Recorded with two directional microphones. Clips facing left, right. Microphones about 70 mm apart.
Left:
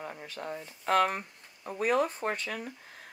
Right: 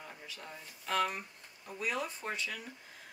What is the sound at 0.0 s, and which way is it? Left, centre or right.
Speech, left.